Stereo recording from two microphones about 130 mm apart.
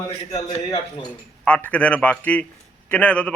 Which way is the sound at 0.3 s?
55° left (ahead or behind).